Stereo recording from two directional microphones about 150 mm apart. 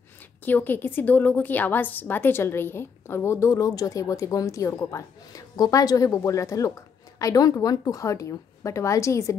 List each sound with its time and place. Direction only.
0.5 s a woman's voice: 15° left (ahead or behind)